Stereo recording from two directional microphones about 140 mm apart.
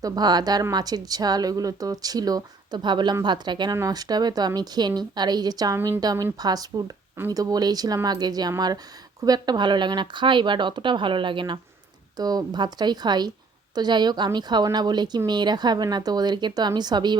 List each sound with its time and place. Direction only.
0.0 s a woman's voice: 30° right (ahead or behind)